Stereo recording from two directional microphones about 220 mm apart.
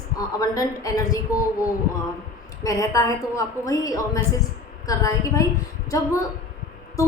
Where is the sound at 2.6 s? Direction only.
15° left (ahead or behind).